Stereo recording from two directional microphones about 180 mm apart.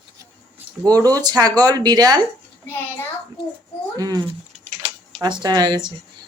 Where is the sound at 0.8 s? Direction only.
20° right (ahead or behind).